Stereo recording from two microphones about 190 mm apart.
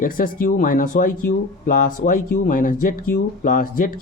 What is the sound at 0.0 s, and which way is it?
Speech, 50° left (ahead or behind).